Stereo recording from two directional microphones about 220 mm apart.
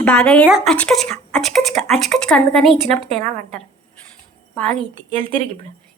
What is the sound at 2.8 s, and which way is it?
Speech, 30° right (ahead or behind).